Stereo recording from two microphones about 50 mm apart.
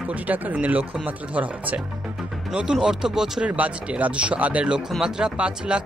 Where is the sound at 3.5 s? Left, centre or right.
Right.